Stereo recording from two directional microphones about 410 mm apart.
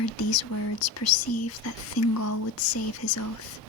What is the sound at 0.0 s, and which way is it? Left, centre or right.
Speech, left.